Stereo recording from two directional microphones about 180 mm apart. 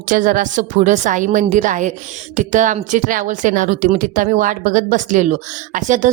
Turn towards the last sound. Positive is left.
turn(degrees=-45)  # may be behind; listen again after turning